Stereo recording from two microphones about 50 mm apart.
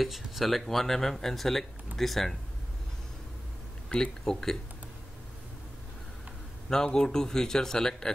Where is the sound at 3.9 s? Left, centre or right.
Left.